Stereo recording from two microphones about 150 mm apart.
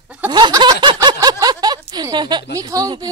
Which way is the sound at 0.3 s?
30° right (ahead or behind).